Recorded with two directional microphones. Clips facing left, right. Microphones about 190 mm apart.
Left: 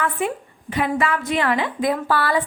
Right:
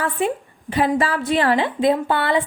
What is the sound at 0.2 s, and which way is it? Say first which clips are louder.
A woman's voice: right 3 dB; 30° right (ahead or behind).